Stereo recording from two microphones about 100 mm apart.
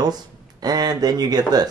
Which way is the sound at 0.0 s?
40° right (ahead or behind).